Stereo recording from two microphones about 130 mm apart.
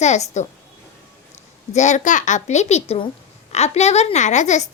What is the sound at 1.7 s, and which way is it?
A woman's voice, 65° left (ahead or behind).